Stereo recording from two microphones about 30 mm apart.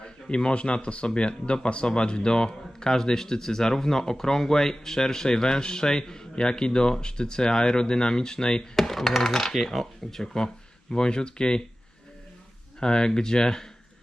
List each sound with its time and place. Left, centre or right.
0.0 s speech: left
8.7 s speech: centre
10.3 s speech: left
12.8 s speech: left